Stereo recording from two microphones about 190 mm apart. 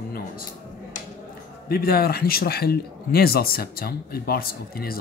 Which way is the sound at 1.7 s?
55° left (ahead or behind).